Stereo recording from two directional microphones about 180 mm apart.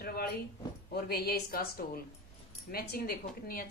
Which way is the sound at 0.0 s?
60° left (ahead or behind).